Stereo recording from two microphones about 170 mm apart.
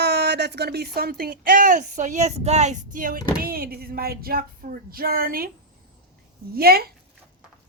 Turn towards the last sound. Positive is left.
turn(degrees=-65)  # may be behind; listen again after turning